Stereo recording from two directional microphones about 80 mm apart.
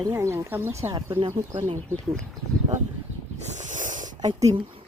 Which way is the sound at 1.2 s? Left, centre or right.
Right.